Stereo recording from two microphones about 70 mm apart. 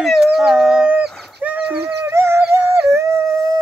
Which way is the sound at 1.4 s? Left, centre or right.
Right.